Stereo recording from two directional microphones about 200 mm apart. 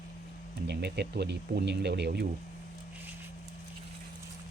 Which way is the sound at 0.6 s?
55° right (ahead or behind).